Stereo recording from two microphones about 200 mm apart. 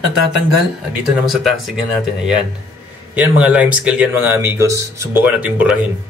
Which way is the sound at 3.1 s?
5° right (ahead or behind).